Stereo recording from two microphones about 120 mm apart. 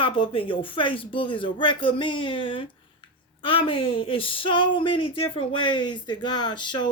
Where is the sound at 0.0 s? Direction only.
45° left (ahead or behind).